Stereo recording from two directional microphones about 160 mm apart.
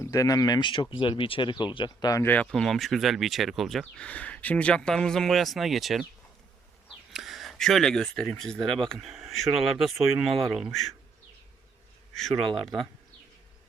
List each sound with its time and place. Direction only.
0.0 s speech: 20° left (ahead or behind)
2.2 s speech: 10° left (ahead or behind)
7.1 s speech: centre (ahead or behind)
12.1 s speech: centre (ahead or behind)